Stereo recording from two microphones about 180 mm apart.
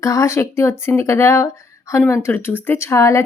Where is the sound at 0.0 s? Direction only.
15° left (ahead or behind).